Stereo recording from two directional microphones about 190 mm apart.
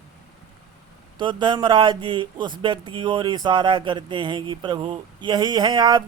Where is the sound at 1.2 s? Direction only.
25° right (ahead or behind).